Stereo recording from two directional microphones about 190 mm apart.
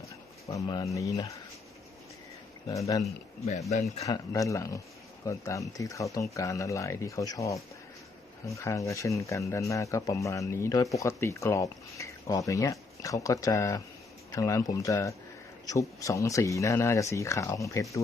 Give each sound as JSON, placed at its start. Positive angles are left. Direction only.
{"t": 0.4, "sound": "speech", "side_deg": 20}
{"t": 2.6, "sound": "speech", "side_deg": 15}
{"t": 3.7, "sound": "speech", "side_deg": 35}
{"t": 4.0, "sound": "speech", "side_deg": 15}